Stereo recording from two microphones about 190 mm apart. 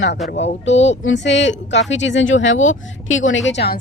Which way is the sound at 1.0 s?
70° left (ahead or behind).